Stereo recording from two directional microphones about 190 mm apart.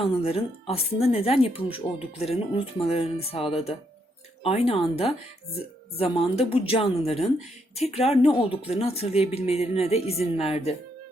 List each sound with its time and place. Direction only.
0.0 s a woman's voice: 30° left (ahead or behind)